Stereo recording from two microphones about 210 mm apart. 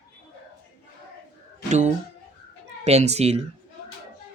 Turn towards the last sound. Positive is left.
turn(degrees=-30)  # may be behind; listen again after turning